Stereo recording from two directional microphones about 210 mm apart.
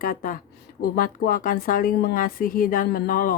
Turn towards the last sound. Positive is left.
turn(degrees=40)  # may be behind; listen again after turning